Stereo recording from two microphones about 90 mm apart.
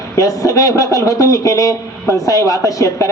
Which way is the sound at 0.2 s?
40° left (ahead or behind).